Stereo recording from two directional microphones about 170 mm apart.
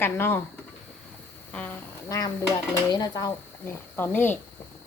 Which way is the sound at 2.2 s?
20° left (ahead or behind).